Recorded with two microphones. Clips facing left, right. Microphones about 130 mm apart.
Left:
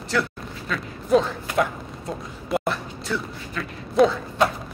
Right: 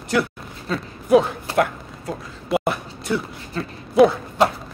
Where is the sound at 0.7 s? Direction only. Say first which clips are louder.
Right 4 dB; 35° right (ahead or behind).